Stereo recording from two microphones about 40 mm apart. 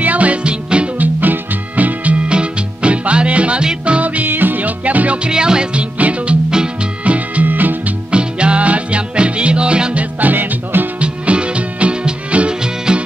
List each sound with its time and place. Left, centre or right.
0.0 s music: right
0.4 s music: right
0.9 s music: right
2.2 s music: right
5.3 s music: right
6.5 s music: right
7.1 s music: right
7.4 s music: right
8.1 s music: right
9.9 s music: right
11.0 s music: right